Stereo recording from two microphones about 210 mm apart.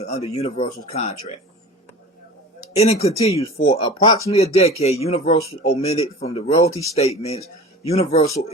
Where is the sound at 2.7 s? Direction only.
30° left (ahead or behind).